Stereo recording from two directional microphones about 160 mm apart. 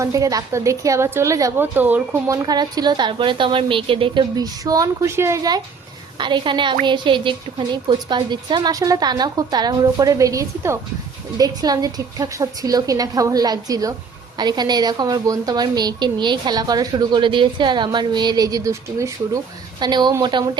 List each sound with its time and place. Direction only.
0.0 s a woman's voice: 20° right (ahead or behind)